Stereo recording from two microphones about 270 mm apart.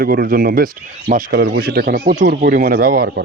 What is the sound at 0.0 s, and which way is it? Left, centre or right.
Speech, right.